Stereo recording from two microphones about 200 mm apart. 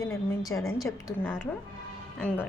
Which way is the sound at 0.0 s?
15° left (ahead or behind).